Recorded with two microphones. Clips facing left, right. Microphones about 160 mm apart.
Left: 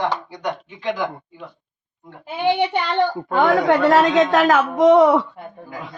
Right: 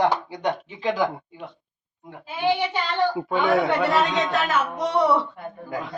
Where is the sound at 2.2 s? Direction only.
60° left (ahead or behind).